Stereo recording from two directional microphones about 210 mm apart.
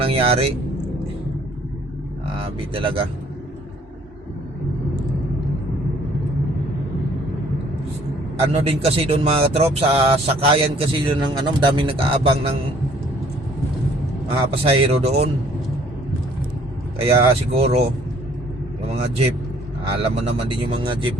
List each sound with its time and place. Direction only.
0.0 s speech: 25° right (ahead or behind)
2.4 s speech: 25° right (ahead or behind)
8.5 s speech: 30° right (ahead or behind)
14.3 s speech: 25° right (ahead or behind)
17.2 s speech: 30° right (ahead or behind)
20.0 s speech: 25° right (ahead or behind)